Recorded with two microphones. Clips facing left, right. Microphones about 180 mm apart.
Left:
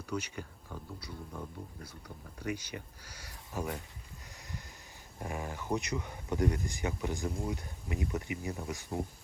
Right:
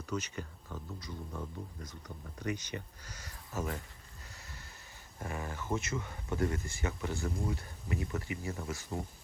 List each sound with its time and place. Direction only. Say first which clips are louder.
0.0 s speech: even; 10° left (ahead or behind)
4.3 s a sound: left 6 dB; 15° left (ahead or behind)
5.2 s speech: left 1 dB; 15° left (ahead or behind)